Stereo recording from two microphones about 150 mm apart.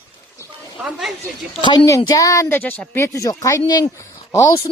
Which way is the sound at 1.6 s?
30° left (ahead or behind).